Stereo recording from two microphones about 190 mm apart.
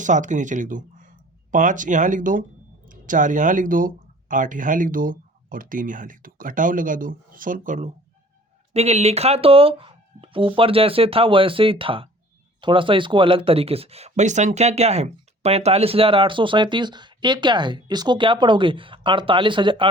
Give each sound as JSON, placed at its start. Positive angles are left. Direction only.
{"t": 0.0, "sound": "speech", "side_deg": -40}